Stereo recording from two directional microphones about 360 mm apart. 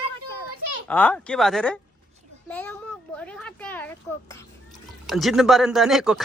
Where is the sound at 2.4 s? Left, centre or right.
Centre.